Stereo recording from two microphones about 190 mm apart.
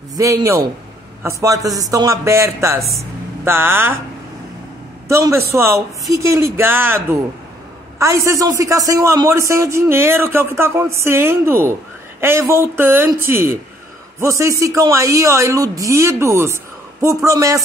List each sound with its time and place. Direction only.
0.1 s a man's voice: 15° right (ahead or behind)
5.0 s a man's voice: 15° right (ahead or behind)